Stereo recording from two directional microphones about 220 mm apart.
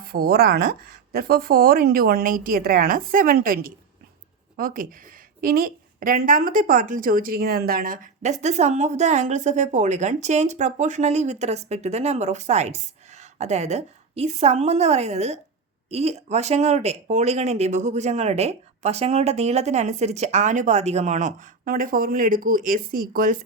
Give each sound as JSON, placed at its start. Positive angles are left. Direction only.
{"t": 0.0, "sound": "a woman's voice", "side_deg": -45}